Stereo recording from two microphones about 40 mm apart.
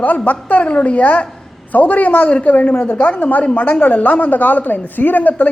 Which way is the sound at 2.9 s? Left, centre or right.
Left.